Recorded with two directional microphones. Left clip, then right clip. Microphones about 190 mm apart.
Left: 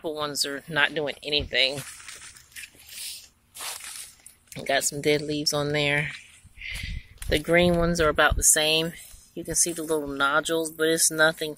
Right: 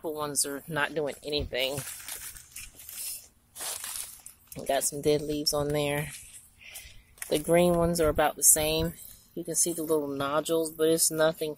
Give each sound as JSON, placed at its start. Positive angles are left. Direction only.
{"t": 0.0, "sound": "speech", "side_deg": 0}
{"t": 4.6, "sound": "speech", "side_deg": 5}
{"t": 9.8, "sound": "speech", "side_deg": 20}
{"t": 10.1, "sound": "speech", "side_deg": 5}